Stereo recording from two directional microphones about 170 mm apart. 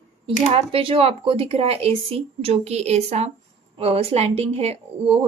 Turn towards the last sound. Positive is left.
turn(degrees=-35)  # may be behind; listen again after turning